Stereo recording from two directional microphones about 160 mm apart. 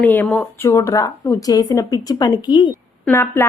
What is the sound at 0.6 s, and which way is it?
A woman's voice, 20° left (ahead or behind).